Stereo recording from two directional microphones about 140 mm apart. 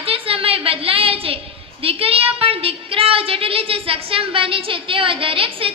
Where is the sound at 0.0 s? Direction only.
40° right (ahead or behind).